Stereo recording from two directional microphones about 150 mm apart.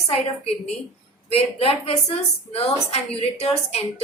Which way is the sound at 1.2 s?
40° left (ahead or behind).